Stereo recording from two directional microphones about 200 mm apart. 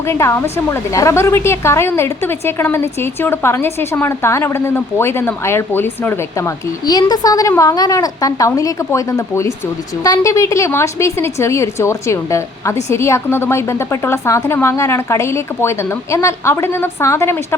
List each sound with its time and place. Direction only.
0.0 s a woman's voice: 15° left (ahead or behind)